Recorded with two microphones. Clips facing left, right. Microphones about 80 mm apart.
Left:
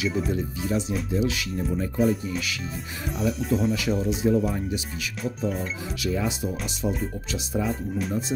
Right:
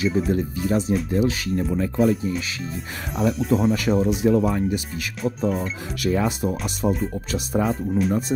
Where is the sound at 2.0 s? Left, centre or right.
Centre.